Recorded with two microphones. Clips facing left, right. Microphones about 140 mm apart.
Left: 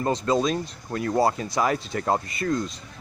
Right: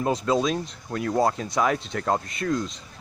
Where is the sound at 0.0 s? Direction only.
5° right (ahead or behind).